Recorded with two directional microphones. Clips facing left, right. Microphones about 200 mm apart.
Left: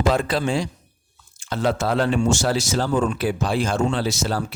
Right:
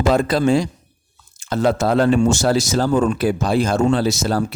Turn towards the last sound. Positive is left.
turn(degrees=-45)  # may be behind; listen again after turning